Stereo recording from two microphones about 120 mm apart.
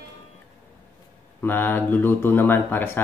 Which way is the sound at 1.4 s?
15° left (ahead or behind).